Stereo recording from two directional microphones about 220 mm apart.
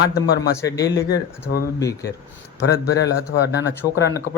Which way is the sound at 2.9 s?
50° left (ahead or behind).